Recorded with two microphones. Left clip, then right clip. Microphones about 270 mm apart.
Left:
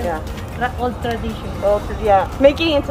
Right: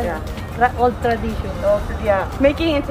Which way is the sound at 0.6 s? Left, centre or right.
Centre.